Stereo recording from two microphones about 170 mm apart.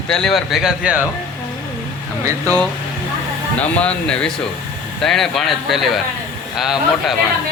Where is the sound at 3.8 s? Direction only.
5° left (ahead or behind).